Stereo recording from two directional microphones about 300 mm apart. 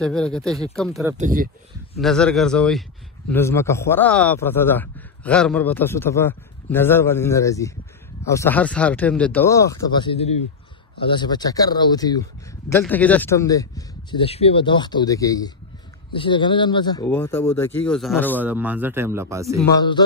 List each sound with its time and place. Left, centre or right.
0.0 s speech: centre
1.1 s speech: right
2.0 s a man's voice: centre
19.7 s a man's voice: centre